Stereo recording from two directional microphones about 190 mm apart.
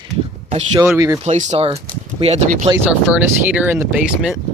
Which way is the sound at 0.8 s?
15° right (ahead or behind).